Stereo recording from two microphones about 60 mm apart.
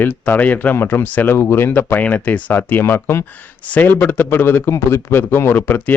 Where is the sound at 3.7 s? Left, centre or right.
Left.